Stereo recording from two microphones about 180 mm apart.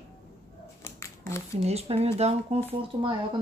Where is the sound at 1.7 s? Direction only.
35° right (ahead or behind).